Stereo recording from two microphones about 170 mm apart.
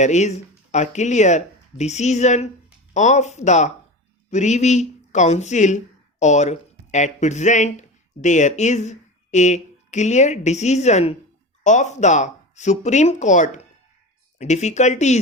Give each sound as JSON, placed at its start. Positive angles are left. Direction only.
{"t": 0.0, "sound": "speech", "side_deg": 45}